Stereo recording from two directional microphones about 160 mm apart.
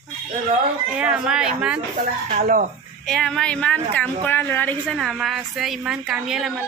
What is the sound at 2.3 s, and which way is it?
Speech, 50° right (ahead or behind).